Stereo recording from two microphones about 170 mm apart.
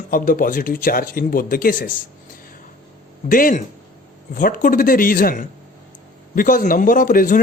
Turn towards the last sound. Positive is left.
turn(degrees=55)  # may be behind; listen again after turning